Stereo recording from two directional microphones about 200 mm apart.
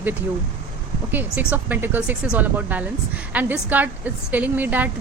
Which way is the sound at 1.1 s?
10° right (ahead or behind).